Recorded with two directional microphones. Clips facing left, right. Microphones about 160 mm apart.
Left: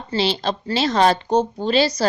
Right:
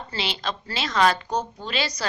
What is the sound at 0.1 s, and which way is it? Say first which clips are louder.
A woman's voice: left 9 dB; 30° left (ahead or behind).